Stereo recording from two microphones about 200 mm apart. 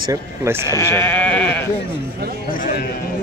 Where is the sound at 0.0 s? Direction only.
15° right (ahead or behind).